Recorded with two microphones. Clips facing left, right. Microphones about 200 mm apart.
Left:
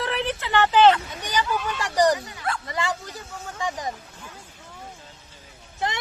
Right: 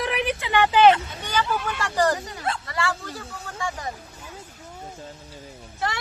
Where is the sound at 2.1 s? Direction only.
45° right (ahead or behind).